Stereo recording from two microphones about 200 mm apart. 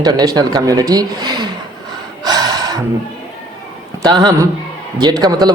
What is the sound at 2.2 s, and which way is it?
Gasp, 20° right (ahead or behind).